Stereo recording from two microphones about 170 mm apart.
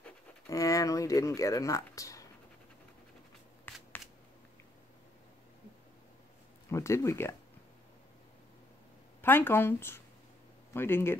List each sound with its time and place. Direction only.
0.5 s speech: 20° left (ahead or behind)
3.7 s shuffling cards: 10° left (ahead or behind)
6.7 s speech: 15° left (ahead or behind)
9.2 s speech: 15° left (ahead or behind)